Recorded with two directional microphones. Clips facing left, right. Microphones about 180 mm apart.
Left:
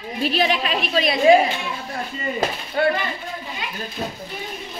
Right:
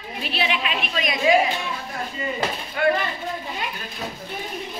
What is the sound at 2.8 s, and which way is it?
Speech, 35° left (ahead or behind).